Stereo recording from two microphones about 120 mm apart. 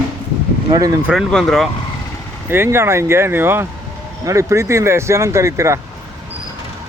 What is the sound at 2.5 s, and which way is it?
Speech, 20° right (ahead or behind).